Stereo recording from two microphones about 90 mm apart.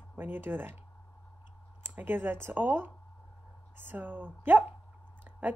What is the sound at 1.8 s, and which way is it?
Speech, 20° right (ahead or behind).